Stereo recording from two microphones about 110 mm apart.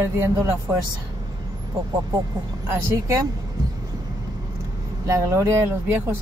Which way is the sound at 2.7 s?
25° right (ahead or behind).